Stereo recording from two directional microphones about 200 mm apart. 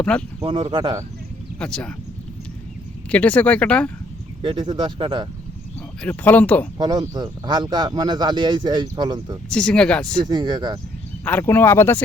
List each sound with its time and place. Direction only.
0.0 s speech: 5° left (ahead or behind)
0.3 s speech: 25° right (ahead or behind)
1.5 s speech: 5° left (ahead or behind)
3.1 s speech: 5° left (ahead or behind)
4.4 s speech: 25° right (ahead or behind)
6.0 s speech: 10° left (ahead or behind)
6.7 s speech: 20° right (ahead or behind)
9.5 s speech: 5° left (ahead or behind)
10.2 s speech: 20° right (ahead or behind)
11.3 s speech: 10° left (ahead or behind)